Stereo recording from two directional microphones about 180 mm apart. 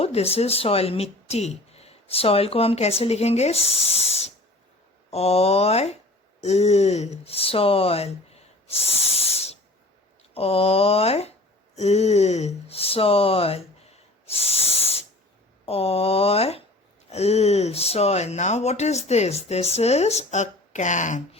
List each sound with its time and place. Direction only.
0.0 s speech: 35° left (ahead or behind)